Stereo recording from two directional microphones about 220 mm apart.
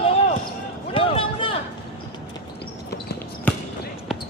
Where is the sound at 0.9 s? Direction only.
25° left (ahead or behind).